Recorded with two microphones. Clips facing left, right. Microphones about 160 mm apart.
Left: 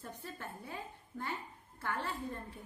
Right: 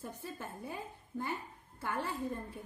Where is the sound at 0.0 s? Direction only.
15° right (ahead or behind).